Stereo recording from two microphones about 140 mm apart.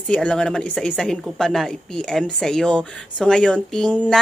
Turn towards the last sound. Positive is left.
turn(degrees=5)  # may be behind; listen again after turning